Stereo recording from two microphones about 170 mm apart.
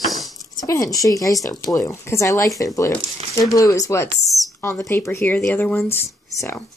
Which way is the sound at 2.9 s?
35° right (ahead or behind).